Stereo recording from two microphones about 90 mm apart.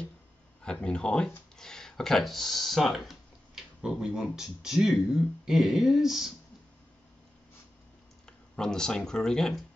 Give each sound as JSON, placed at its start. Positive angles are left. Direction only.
{"t": 0.7, "sound": "speech", "side_deg": 10}
{"t": 8.3, "sound": "speech", "side_deg": 5}